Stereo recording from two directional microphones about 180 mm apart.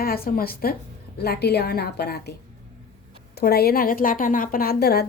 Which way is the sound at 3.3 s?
60° left (ahead or behind).